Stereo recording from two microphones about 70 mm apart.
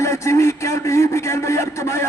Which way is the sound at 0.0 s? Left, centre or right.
Left.